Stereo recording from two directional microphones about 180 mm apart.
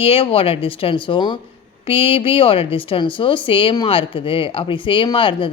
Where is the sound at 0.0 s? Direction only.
30° left (ahead or behind).